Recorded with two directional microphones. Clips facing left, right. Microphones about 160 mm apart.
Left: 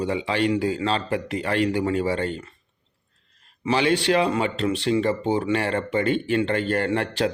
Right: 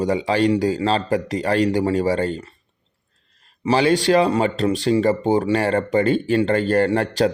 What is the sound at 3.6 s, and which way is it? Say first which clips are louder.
A man's voice: right 4 dB; 35° right (ahead or behind).